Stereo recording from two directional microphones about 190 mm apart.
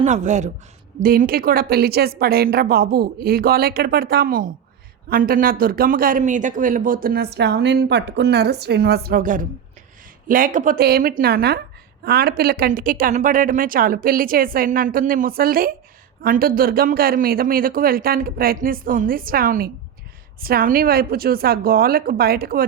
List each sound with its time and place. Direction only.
0.0 s speech: 40° right (ahead or behind)